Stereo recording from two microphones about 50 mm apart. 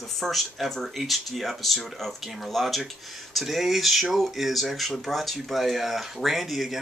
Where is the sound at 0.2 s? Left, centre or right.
Centre.